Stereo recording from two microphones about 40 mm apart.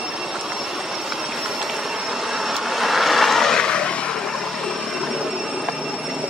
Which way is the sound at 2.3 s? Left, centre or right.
Centre.